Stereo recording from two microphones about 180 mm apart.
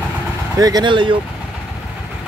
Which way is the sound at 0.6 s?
20° right (ahead or behind).